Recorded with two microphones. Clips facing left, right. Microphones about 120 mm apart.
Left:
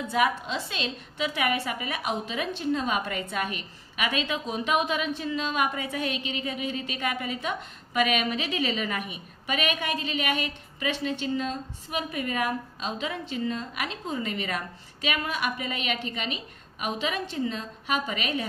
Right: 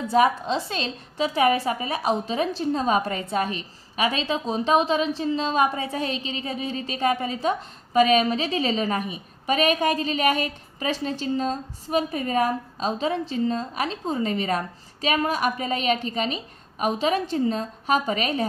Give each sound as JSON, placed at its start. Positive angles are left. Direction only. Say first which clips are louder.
{"t": 0.1, "sound": "a woman's voice", "louder": "right 6 dB", "side_deg": -35}